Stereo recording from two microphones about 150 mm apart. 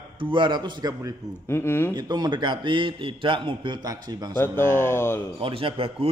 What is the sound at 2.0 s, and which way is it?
A man's voice, 25° right (ahead or behind).